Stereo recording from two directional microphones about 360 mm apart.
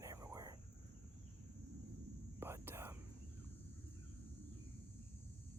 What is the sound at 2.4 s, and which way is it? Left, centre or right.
Whispering, centre.